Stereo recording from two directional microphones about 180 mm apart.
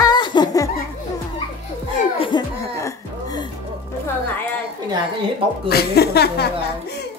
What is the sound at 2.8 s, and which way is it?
Music, 20° left (ahead or behind).